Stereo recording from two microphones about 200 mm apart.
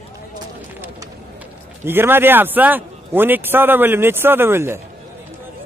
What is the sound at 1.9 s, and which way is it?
Speech, 10° right (ahead or behind).